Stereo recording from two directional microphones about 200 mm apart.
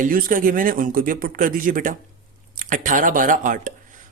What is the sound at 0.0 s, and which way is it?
Speech, 40° right (ahead or behind).